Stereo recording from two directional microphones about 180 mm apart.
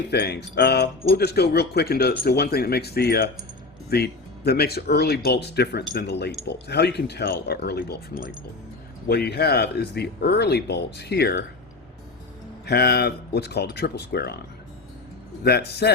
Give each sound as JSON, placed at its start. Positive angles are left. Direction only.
{"t": 0.1, "sound": "speech", "side_deg": 65}
{"t": 9.0, "sound": "speech", "side_deg": 65}
{"t": 12.6, "sound": "speech", "side_deg": 65}
{"t": 15.4, "sound": "speech", "side_deg": 65}